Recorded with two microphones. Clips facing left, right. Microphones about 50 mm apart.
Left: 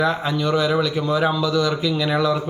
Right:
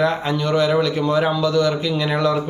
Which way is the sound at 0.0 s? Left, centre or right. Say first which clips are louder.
Right 1 dB; right.